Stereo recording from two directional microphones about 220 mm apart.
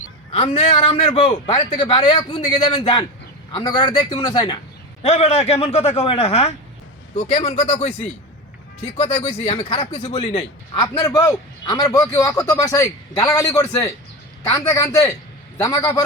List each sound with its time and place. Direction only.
0.3 s a man's voice: 25° left (ahead or behind)